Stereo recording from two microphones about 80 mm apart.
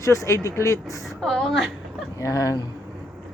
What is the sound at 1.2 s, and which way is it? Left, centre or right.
Speech, centre.